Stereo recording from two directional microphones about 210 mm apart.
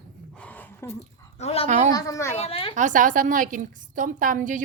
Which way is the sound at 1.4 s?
30° left (ahead or behind).